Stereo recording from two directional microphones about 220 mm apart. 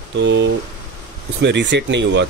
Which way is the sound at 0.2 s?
55° right (ahead or behind).